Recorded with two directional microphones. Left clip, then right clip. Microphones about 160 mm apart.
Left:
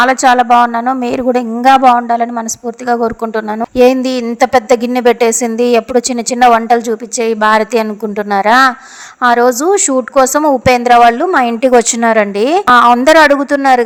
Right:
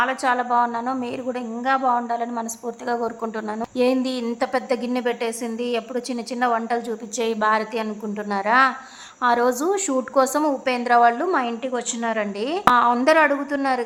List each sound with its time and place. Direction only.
0.0 s a woman's voice: 45° left (ahead or behind)